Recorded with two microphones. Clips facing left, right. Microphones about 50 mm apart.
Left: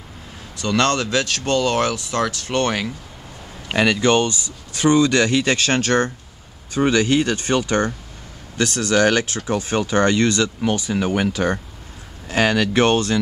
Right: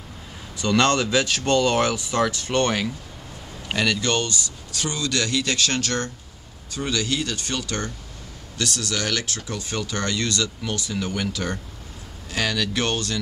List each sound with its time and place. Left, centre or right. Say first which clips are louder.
0.6 s speech: left 1 dB; centre
3.6 s speech: left 6 dB; centre